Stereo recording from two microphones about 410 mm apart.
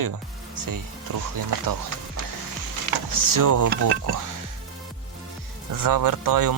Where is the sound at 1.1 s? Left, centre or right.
Right.